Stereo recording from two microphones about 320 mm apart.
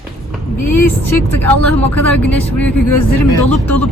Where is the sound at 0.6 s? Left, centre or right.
Left.